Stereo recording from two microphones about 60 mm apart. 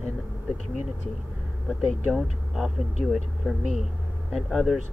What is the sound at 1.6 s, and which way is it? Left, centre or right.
Speech, centre.